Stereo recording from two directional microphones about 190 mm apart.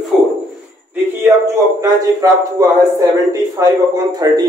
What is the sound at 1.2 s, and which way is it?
A man's voice, 15° right (ahead or behind).